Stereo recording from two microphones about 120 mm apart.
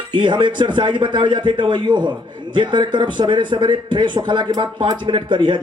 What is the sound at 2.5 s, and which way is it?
A man's voice, 40° right (ahead or behind).